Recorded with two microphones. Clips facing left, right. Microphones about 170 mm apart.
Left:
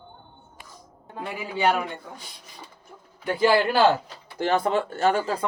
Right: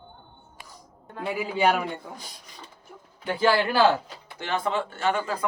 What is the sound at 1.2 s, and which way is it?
Speech, 5° right (ahead or behind).